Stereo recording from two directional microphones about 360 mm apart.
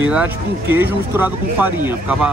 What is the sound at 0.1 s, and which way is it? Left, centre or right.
Speech, centre.